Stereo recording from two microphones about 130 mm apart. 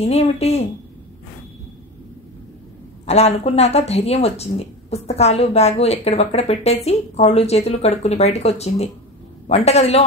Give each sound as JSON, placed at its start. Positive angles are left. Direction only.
{"t": 0.0, "sound": "speech", "side_deg": 55}
{"t": 3.1, "sound": "speech", "side_deg": 55}